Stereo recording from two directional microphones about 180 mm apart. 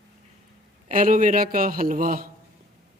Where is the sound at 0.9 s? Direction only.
50° right (ahead or behind).